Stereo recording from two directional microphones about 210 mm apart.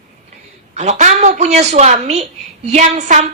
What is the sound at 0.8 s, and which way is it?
Child singing, 35° right (ahead or behind).